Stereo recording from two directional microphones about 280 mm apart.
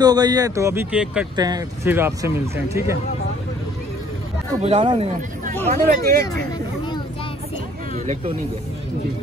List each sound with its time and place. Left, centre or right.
0.0 s speech: centre
4.6 s speech: right
5.7 s speech: right
7.9 s speech: right